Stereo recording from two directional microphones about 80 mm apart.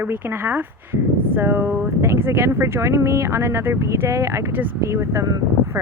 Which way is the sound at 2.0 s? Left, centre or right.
Right.